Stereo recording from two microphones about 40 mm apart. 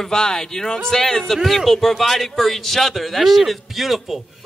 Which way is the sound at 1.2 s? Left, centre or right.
Centre.